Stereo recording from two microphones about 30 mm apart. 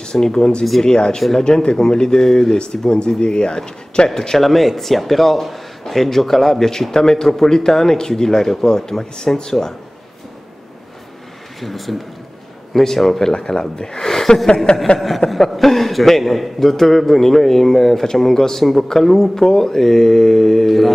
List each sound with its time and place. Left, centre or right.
0.0 s speech: left
4.4 s speech: centre
6.7 s a man's voice: centre
11.6 s a man's voice: centre
13.2 s speech: left
15.0 s a man's voice: centre
18.9 s a man's voice: centre